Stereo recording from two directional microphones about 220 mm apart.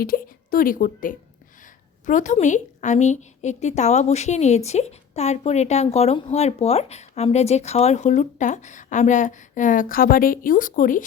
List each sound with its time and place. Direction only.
0.0 s a woman's voice: 40° left (ahead or behind)